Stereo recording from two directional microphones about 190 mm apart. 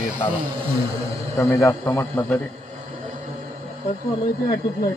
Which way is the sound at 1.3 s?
15° left (ahead or behind).